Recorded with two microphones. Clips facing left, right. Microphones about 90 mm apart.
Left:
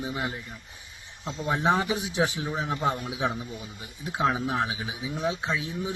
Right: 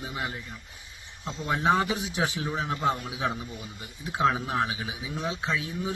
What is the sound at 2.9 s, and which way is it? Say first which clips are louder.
Speech: even; 25° right (ahead or behind).